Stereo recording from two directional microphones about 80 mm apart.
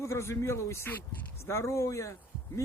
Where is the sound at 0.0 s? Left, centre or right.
Left.